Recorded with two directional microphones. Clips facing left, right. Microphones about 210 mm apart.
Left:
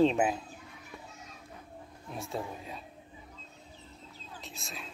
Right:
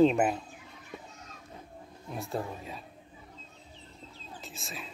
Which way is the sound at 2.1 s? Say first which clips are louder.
Right 2 dB; centre (ahead or behind).